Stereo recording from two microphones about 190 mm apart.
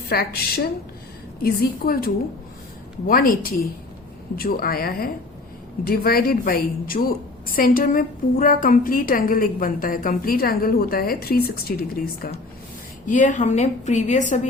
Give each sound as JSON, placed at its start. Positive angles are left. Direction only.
{"t": 0.1, "sound": "a woman's voice", "side_deg": 55}
{"t": 13.1, "sound": "a woman's voice", "side_deg": 40}